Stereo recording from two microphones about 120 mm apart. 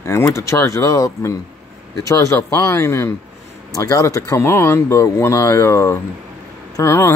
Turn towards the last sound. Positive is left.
turn(degrees=20)  # may be behind; listen again after turning